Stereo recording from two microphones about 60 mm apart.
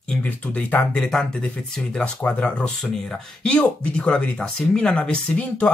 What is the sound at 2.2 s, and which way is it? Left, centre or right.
Speech, left.